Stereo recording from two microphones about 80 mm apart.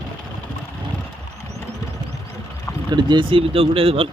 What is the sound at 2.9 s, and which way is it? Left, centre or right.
Speech, right.